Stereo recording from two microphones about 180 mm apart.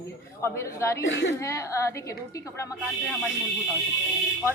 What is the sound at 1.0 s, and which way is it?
Speech, 90° left.